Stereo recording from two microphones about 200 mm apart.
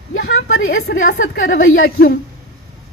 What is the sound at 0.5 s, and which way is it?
A woman's voice, 55° left (ahead or behind).